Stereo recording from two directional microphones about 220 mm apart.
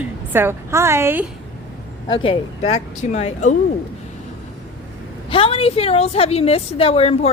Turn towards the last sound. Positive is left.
turn(degrees=25)  # may be behind; listen again after turning